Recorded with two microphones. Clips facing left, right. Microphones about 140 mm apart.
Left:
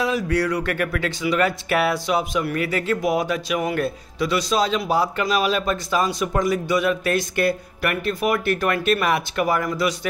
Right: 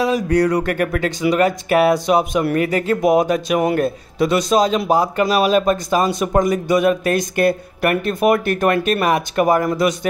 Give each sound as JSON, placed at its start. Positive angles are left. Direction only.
{"t": 0.0, "sound": "speech", "side_deg": -40}